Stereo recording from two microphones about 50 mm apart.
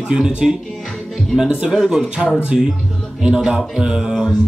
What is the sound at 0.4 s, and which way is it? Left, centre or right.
Speech, centre.